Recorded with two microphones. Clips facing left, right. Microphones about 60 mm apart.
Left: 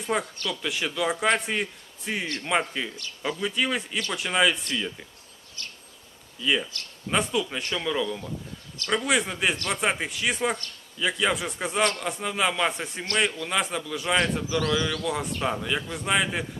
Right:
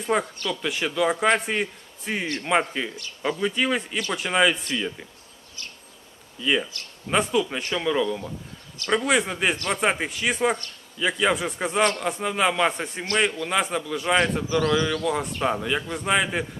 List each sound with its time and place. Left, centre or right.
0.0 s a man's voice: centre
2.2 s speech: centre
2.5 s a man's voice: centre
5.6 s bee: right
6.4 s a man's voice: centre